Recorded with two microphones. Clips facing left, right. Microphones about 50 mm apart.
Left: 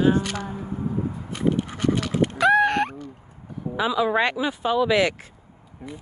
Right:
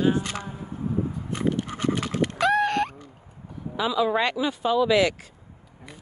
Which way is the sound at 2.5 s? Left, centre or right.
Left.